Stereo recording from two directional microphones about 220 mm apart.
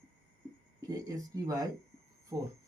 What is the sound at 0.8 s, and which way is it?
Speech, 15° right (ahead or behind).